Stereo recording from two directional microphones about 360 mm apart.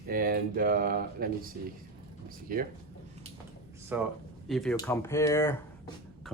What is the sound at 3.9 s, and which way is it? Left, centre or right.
Speech, centre.